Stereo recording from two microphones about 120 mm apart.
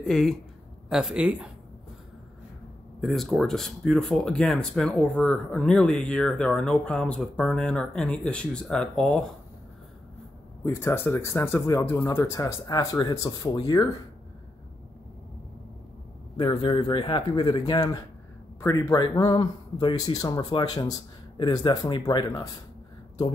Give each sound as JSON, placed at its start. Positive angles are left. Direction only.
{"t": 0.0, "sound": "speech", "side_deg": 5}
{"t": 3.0, "sound": "speech", "side_deg": 0}
{"t": 10.6, "sound": "speech", "side_deg": 20}
{"t": 16.3, "sound": "speech", "side_deg": 45}
{"t": 18.6, "sound": "speech", "side_deg": 25}
{"t": 18.9, "sound": "speech", "side_deg": 35}